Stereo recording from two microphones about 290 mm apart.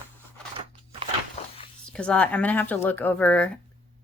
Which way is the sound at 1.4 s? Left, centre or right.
Left.